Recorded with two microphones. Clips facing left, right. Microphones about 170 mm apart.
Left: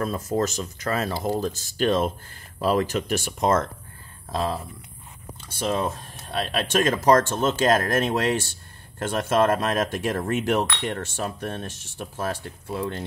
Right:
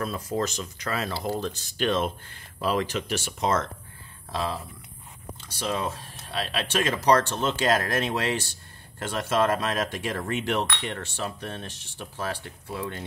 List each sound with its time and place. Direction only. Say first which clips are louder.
0.0 s speech: left 4 dB; 45° left (ahead or behind)